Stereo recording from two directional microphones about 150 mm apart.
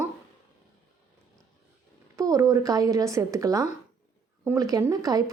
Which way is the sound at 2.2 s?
25° right (ahead or behind).